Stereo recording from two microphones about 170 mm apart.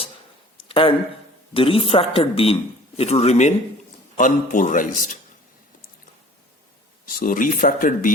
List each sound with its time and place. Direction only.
0.7 s a man's voice: 30° left (ahead or behind); by 5.1 s 50° left (ahead or behind)
7.0 s speech: 55° left (ahead or behind)